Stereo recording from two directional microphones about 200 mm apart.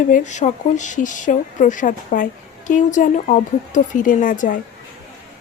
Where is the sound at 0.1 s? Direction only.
35° left (ahead or behind).